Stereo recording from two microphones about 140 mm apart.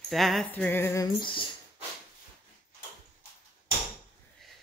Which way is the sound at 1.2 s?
35° left (ahead or behind).